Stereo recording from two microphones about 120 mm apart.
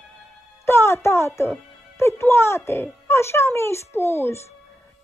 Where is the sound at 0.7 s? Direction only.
20° left (ahead or behind).